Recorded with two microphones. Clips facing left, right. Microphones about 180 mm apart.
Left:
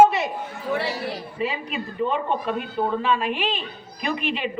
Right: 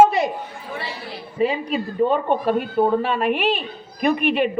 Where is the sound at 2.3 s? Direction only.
55° right (ahead or behind).